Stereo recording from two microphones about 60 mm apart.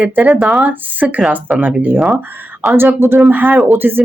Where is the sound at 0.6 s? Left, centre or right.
Right.